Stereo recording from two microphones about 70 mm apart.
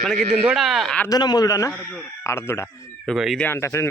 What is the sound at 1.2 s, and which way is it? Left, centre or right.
Speech, left.